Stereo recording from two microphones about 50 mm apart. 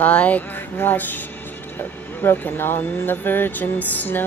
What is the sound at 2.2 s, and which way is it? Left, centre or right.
Speech, left.